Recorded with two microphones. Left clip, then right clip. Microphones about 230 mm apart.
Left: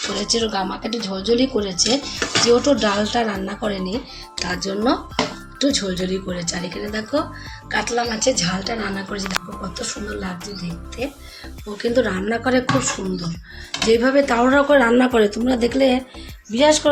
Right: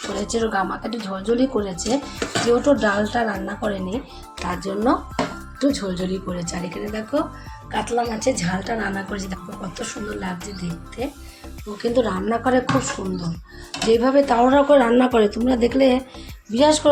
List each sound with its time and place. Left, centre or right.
0.1 s speech: centre
2.4 s speech: centre